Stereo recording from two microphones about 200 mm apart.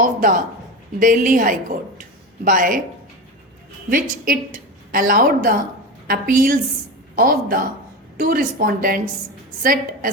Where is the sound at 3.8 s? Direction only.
45° right (ahead or behind).